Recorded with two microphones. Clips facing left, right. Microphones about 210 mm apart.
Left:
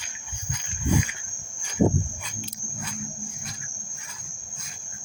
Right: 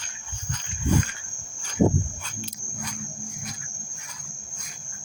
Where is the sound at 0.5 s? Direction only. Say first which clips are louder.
Right 1 dB; 10° left (ahead or behind).